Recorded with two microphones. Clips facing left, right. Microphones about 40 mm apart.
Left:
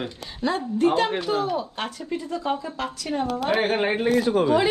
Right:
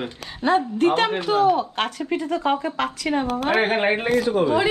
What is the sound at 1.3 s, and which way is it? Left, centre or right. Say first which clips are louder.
Speech: right 6 dB; right.